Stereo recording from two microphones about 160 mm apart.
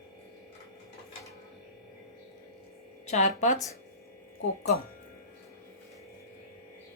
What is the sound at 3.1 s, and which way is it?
Speech, 50° left (ahead or behind).